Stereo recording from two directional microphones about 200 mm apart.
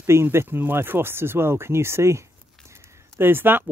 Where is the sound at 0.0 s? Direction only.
10° right (ahead or behind).